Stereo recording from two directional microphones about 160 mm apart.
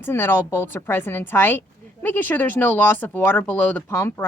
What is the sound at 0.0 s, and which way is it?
A woman's voice, 15° left (ahead or behind).